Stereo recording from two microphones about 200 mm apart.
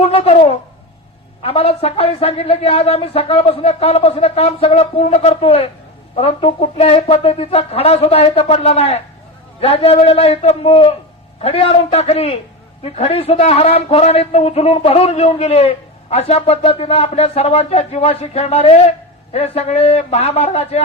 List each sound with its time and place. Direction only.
0.0 s a woman's voice: 30° left (ahead or behind)